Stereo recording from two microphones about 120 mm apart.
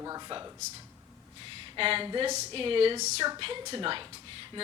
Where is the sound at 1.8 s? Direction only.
50° right (ahead or behind).